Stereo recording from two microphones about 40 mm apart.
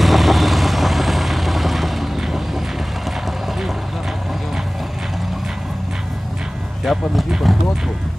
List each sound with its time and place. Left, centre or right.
0.0 s vehicle: centre
6.8 s music: centre